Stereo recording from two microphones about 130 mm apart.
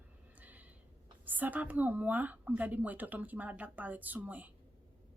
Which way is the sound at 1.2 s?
15° right (ahead or behind).